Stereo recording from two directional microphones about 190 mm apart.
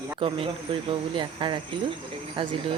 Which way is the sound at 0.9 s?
25° right (ahead or behind).